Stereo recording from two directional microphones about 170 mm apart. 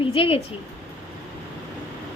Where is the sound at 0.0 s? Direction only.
30° left (ahead or behind).